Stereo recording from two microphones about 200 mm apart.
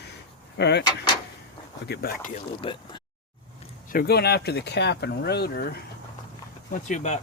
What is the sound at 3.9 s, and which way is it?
Speech, 50° left (ahead or behind).